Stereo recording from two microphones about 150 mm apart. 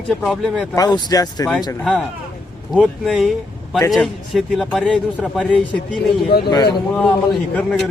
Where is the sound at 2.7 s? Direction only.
Centre (ahead or behind).